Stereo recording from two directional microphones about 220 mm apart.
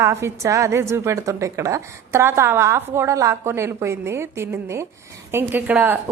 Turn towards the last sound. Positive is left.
turn(degrees=-10)  # may be behind; listen again after turning